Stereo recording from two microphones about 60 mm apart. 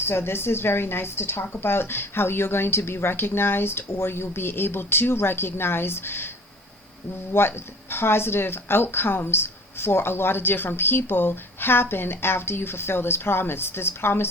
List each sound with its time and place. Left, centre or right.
0.0 s speech: left
7.3 s speech: left